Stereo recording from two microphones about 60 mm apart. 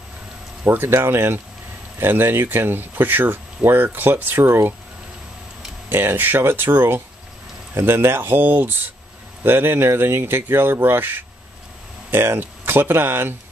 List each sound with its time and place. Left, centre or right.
0.7 s speech: right
5.9 s speech: right